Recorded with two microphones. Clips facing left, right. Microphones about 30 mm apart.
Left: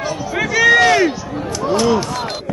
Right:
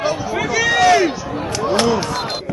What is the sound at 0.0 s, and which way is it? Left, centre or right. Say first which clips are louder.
Run: right 2 dB; centre.